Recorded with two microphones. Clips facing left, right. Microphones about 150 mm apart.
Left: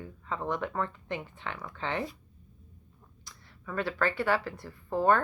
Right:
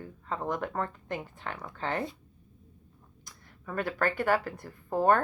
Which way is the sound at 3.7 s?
45° right (ahead or behind).